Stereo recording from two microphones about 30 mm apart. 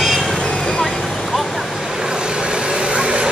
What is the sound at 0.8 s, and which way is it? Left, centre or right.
Vehicle, centre.